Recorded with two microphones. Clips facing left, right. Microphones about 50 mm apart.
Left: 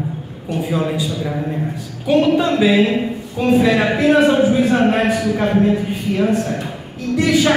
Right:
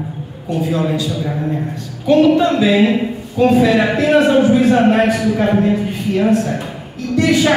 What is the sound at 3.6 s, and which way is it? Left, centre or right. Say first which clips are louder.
Speech: right 2 dB; centre.